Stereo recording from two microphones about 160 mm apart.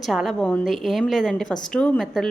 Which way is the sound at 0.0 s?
Centre (ahead or behind).